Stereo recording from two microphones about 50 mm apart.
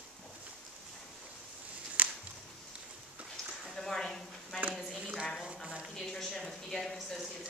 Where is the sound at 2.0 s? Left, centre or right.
Right.